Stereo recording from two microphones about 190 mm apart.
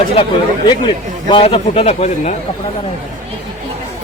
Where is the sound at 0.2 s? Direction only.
25° left (ahead or behind).